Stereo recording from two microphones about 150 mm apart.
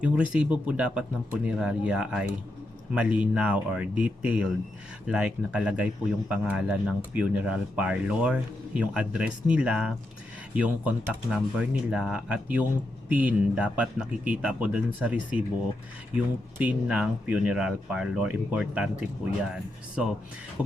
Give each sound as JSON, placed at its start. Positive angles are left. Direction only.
{"t": 0.0, "sound": "speech", "side_deg": -10}